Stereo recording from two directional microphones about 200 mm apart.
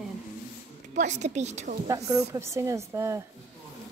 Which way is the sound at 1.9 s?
15° right (ahead or behind).